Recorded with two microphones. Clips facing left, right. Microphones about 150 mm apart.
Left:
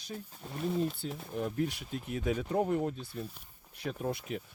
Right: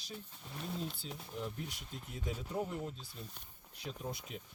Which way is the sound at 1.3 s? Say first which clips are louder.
Left 10 dB; 60° left (ahead or behind).